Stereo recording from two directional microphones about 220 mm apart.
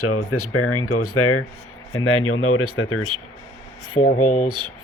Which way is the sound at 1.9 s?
75° left (ahead or behind).